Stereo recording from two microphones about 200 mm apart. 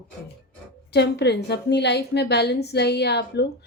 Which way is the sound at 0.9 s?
55° left (ahead or behind).